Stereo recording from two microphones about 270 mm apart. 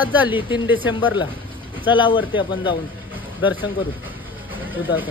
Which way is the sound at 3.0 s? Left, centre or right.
Centre.